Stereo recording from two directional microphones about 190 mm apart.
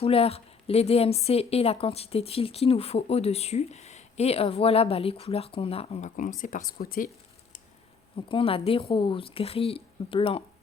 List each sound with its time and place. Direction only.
0.0 s a woman's voice: 30° left (ahead or behind)
6.1 s speech: 45° left (ahead or behind)
8.3 s a woman's voice: 30° left (ahead or behind)